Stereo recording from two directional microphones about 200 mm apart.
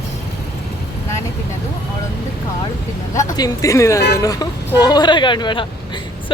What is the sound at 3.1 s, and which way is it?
A woman's voice, 20° left (ahead or behind).